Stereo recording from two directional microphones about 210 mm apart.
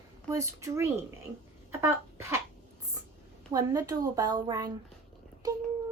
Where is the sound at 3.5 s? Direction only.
15° right (ahead or behind).